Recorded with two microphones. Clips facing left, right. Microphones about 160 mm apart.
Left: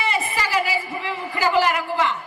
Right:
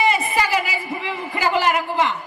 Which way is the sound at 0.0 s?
15° right (ahead or behind).